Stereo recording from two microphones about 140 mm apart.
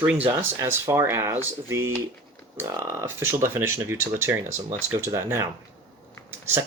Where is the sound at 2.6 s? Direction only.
20° right (ahead or behind).